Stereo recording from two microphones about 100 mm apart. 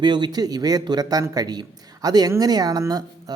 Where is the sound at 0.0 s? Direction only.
50° right (ahead or behind).